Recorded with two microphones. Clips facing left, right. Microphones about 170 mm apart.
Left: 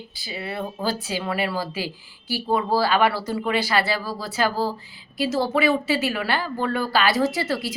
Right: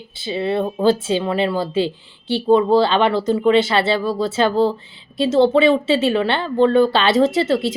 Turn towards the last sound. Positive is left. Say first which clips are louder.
# right 7 dB
turn(degrees=-25)  # may be behind; listen again after turning